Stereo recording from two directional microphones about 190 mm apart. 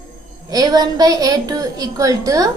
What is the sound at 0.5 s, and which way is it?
A woman's voice, 20° right (ahead or behind).